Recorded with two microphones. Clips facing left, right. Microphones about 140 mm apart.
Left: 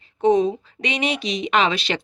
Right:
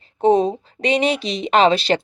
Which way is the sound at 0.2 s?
30° right (ahead or behind).